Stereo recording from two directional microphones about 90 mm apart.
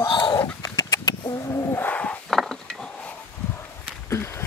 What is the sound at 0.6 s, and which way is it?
Bird, 45° left (ahead or behind).